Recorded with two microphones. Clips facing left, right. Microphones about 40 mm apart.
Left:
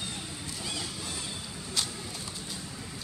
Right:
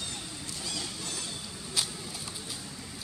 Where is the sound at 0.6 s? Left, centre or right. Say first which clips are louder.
Left 1 dB; centre.